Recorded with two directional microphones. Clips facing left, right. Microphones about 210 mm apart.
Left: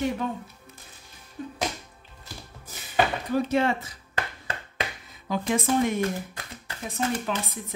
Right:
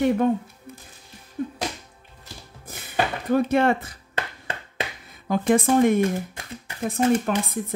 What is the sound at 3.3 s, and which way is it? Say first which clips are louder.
Speech: right 7 dB; 55° right (ahead or behind).